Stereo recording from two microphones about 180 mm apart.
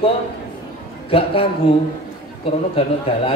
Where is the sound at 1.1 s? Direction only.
30° left (ahead or behind).